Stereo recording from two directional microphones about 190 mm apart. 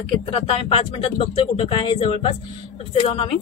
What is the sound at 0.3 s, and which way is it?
Speech, 30° left (ahead or behind).